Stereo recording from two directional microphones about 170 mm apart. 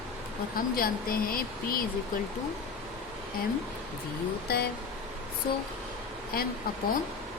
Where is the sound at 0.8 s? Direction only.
60° left (ahead or behind).